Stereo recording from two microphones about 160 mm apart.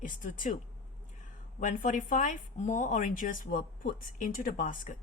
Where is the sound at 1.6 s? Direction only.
55° left (ahead or behind).